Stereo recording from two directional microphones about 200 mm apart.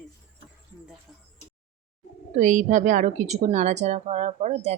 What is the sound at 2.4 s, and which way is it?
Speech, 40° right (ahead or behind).